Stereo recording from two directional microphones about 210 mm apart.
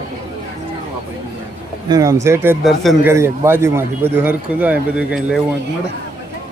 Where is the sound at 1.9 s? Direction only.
15° right (ahead or behind).